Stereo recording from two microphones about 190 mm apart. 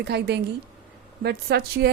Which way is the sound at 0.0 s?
60° right (ahead or behind).